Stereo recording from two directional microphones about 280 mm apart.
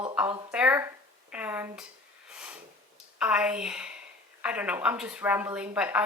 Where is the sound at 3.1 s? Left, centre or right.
Centre.